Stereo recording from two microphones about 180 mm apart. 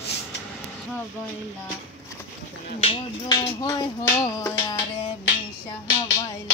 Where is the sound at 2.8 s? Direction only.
25° left (ahead or behind).